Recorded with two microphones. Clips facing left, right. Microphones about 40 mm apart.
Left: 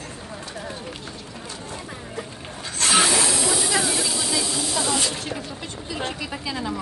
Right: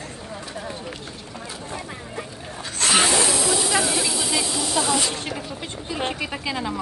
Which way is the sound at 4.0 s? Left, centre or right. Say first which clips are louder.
Right 1 dB; right.